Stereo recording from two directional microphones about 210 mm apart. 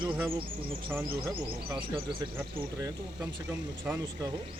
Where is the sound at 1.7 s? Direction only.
20° right (ahead or behind).